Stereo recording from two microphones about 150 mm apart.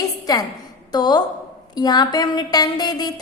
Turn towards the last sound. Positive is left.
turn(degrees=25)  # may be behind; listen again after turning